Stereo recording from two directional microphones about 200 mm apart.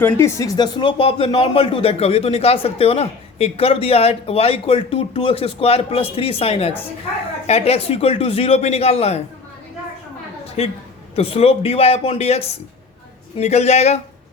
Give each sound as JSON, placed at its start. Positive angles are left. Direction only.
{"t": 0.0, "sound": "speech", "side_deg": 15}
{"t": 11.1, "sound": "speech", "side_deg": 30}